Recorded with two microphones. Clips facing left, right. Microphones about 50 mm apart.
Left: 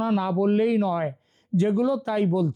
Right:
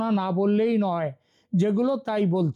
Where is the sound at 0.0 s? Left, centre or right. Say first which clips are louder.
Left 1 dB; centre.